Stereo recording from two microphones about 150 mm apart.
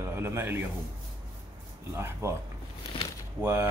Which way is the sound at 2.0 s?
15° right (ahead or behind).